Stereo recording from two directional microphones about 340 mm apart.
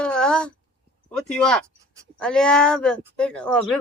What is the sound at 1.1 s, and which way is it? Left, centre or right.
Speech, centre.